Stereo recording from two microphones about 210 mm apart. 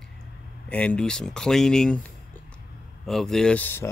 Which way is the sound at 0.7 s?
5° left (ahead or behind).